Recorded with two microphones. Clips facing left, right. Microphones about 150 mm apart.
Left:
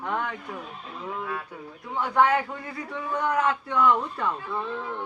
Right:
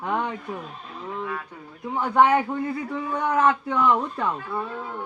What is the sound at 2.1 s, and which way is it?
A man's voice, 20° right (ahead or behind).